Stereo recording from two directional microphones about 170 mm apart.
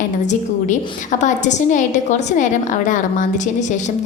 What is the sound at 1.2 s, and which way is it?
A woman's voice, 45° left (ahead or behind).